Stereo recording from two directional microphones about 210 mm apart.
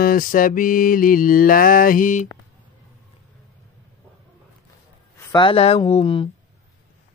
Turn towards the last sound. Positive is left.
turn(degrees=25)  # may be behind; listen again after turning